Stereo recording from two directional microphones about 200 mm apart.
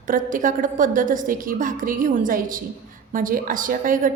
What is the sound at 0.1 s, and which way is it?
A woman's voice, 40° right (ahead or behind).